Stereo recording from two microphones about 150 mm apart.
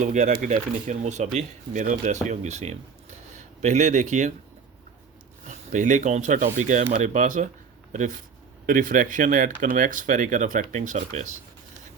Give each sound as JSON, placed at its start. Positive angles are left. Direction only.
{"t": 0.0, "sound": "speech", "side_deg": -55}
{"t": 5.5, "sound": "speech", "side_deg": -55}
{"t": 8.6, "sound": "speech", "side_deg": -65}